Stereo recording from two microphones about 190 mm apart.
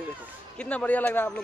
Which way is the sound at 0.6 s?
5° left (ahead or behind).